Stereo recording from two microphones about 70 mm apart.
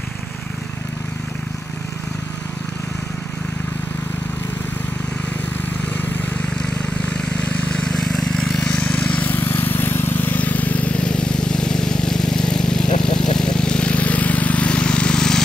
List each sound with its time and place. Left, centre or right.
6.6 s vehicle: centre